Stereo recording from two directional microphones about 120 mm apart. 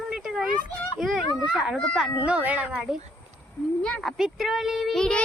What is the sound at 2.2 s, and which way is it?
Speech, 15° right (ahead or behind).